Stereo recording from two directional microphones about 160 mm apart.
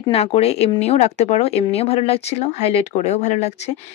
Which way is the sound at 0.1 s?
40° left (ahead or behind).